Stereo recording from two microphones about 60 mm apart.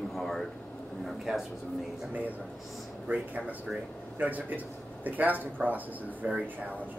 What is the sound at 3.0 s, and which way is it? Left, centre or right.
Speech, right.